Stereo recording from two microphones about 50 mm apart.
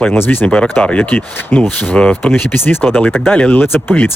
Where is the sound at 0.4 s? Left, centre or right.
Left.